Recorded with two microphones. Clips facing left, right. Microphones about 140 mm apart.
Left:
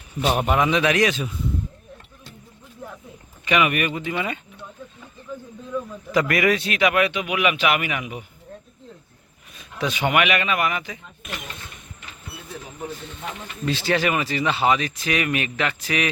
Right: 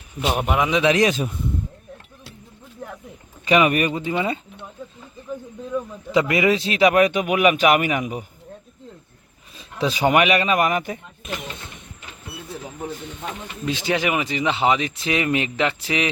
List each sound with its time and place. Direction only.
0.2 s a man's voice: 5° right (ahead or behind)
0.8 s speech: 25° right (ahead or behind)
1.1 s a man's voice: 45° right (ahead or behind)
3.4 s a man's voice: 35° right (ahead or behind)
9.6 s a man's voice: 30° right (ahead or behind); by 11.0 s 45° right (ahead or behind)
13.7 s speech: 15° right (ahead or behind)